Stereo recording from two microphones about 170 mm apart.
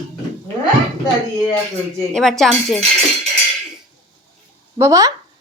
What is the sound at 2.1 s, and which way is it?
Speech, 5° left (ahead or behind).